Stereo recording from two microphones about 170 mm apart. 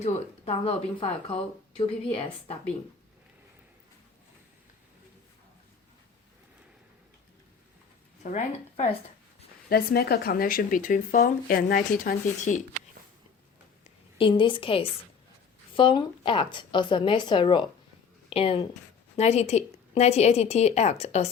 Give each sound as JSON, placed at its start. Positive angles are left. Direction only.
{"t": 0.0, "sound": "a woman's voice", "side_deg": 35}
{"t": 8.2, "sound": "a woman's voice", "side_deg": 45}
{"t": 9.6, "sound": "speech", "side_deg": 65}
{"t": 14.2, "sound": "a woman's voice", "side_deg": 30}